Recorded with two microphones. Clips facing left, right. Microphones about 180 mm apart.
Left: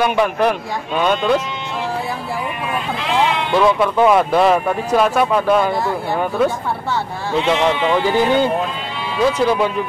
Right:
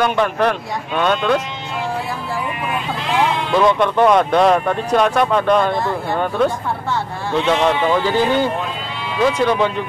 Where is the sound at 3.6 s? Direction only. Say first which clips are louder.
Even; 5° left (ahead or behind).